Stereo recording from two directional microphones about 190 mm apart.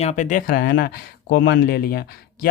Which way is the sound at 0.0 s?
40° left (ahead or behind).